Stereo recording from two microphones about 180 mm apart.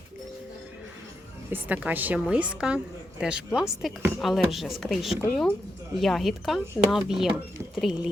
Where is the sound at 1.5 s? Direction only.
10° right (ahead or behind).